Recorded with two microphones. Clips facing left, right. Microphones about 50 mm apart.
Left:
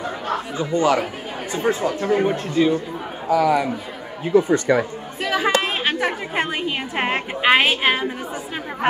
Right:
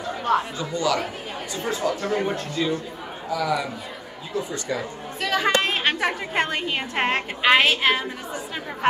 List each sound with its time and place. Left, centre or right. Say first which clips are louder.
0.6 s speech: left 5 dB; left
5.2 s a woman's voice: left 2 dB; centre